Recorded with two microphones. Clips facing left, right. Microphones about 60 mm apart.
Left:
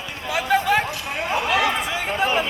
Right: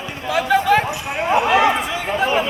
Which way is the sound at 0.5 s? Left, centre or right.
Centre.